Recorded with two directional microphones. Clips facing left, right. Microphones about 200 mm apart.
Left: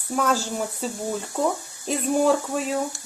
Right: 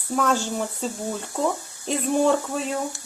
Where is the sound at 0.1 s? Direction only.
5° left (ahead or behind).